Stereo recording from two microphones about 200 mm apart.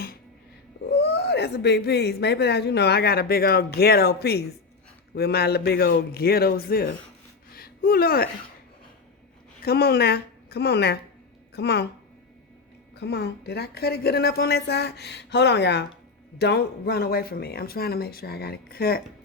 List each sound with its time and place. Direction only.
1.0 s a woman's voice: 55° left (ahead or behind)
7.5 s a sound: 50° left (ahead or behind)
9.6 s a woman's voice: 50° left (ahead or behind)
13.0 s a woman's voice: 55° left (ahead or behind)